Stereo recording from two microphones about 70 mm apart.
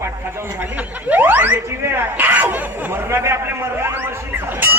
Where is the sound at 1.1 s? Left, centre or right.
Right.